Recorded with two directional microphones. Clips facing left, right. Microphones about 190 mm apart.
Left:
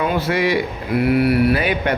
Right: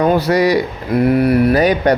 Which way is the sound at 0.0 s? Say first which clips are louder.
Right 6 dB; 40° right (ahead or behind).